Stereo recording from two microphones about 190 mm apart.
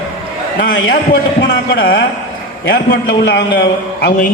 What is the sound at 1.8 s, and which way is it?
A man's voice, 65° left (ahead or behind).